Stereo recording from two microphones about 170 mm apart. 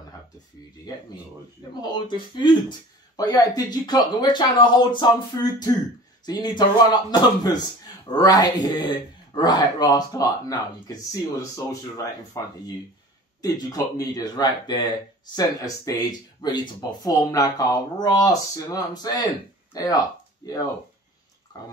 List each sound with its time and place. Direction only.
1.8 s speech: 25° left (ahead or behind)
21.5 s speech: 20° left (ahead or behind)